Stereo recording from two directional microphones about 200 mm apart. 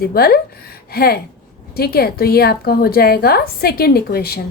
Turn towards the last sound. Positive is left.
turn(degrees=50)  # may be behind; listen again after turning